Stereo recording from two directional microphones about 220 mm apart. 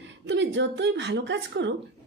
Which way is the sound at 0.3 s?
55° right (ahead or behind).